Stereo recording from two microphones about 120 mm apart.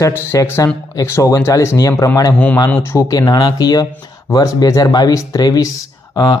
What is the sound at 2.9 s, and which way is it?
Speech, 30° left (ahead or behind).